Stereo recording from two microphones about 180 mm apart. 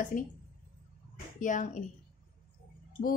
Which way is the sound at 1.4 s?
45° left (ahead or behind).